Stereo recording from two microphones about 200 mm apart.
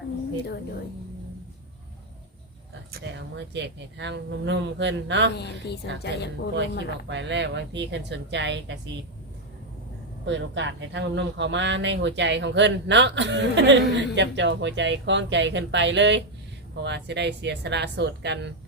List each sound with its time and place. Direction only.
2.9 s speech: 60° right (ahead or behind)
5.4 s a woman's voice: 55° left (ahead or behind)
7.1 s speech: 60° right (ahead or behind)
10.2 s speech: 65° right (ahead or behind)